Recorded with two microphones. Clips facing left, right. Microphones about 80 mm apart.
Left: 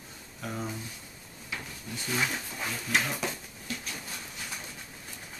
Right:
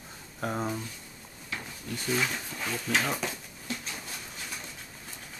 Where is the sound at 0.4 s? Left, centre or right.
Right.